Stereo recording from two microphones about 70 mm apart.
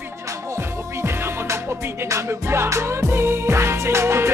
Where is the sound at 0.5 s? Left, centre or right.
Right.